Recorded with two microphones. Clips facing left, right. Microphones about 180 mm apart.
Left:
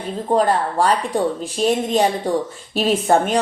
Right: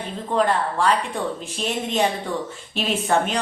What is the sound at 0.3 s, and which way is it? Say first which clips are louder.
A woman's voice: left 3 dB; 40° left (ahead or behind).